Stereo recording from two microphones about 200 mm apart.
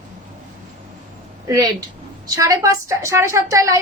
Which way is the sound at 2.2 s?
15° right (ahead or behind).